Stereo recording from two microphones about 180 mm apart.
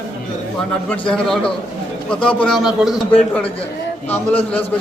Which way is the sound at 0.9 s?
5° left (ahead or behind).